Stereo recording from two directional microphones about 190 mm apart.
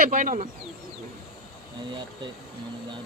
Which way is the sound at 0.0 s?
45° right (ahead or behind).